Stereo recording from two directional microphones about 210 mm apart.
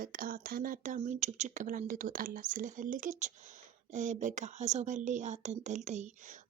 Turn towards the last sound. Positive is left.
turn(degrees=-35)  # may be behind; listen again after turning